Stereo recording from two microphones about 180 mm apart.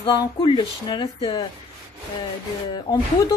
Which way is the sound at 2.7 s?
25° left (ahead or behind).